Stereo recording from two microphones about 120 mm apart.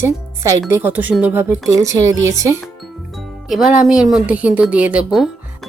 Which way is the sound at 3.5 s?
Centre (ahead or behind).